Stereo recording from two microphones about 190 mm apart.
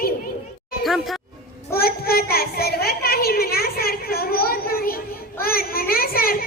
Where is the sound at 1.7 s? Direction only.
55° left (ahead or behind).